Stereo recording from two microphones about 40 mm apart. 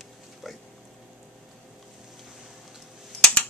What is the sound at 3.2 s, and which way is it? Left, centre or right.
Computer keyboard, left.